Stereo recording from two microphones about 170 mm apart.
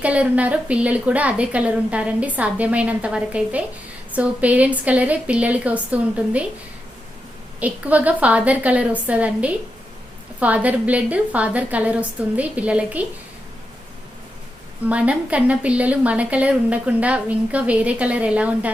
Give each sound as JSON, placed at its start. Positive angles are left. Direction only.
{"t": 0.0, "sound": "a woman's voice", "side_deg": -10}
{"t": 7.6, "sound": "a woman's voice", "side_deg": -10}
{"t": 14.8, "sound": "a woman's voice", "side_deg": -5}